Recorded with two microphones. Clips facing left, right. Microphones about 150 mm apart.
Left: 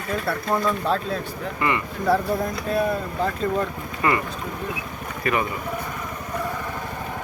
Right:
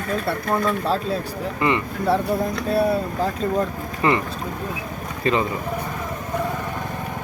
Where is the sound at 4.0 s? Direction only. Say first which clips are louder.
Right 2 dB; 25° right (ahead or behind).